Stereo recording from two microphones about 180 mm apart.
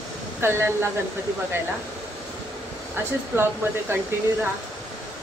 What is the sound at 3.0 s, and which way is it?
Speech, 10° right (ahead or behind).